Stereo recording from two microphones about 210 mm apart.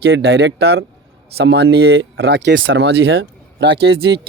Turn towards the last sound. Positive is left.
turn(degrees=-50)  # may be behind; listen again after turning